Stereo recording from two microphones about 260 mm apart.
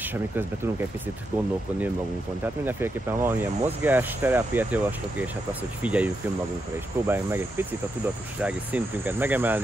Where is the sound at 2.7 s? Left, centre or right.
Centre.